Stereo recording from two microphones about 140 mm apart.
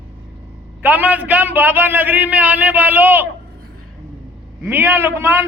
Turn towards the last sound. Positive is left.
turn(degrees=-15)  # may be behind; listen again after turning